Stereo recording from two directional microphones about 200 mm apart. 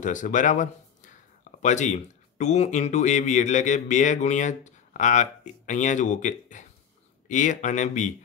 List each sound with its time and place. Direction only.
0.0 s a man's voice: 40° left (ahead or behind)